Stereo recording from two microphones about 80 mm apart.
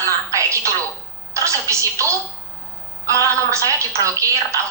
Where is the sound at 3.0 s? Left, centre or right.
Right.